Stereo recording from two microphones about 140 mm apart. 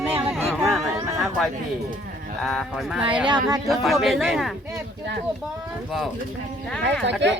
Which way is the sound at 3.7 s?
Centre (ahead or behind).